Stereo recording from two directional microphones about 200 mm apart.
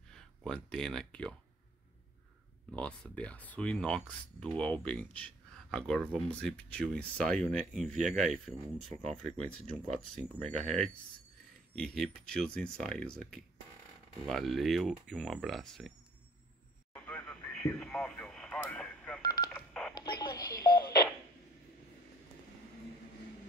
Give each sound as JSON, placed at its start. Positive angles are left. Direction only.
{"t": 0.1, "sound": "speech", "side_deg": 5}
{"t": 2.7, "sound": "speech", "side_deg": 5}
{"t": 16.9, "sound": "radio", "side_deg": 5}
{"t": 19.5, "sound": "telephone dialing", "side_deg": 5}
{"t": 20.2, "sound": "telephone dialing", "side_deg": 20}
{"t": 20.5, "sound": "a sound", "side_deg": 50}